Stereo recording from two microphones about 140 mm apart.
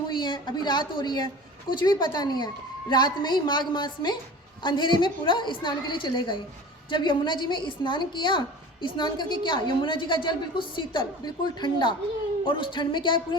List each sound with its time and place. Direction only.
0.1 s a woman's voice: 35° left (ahead or behind)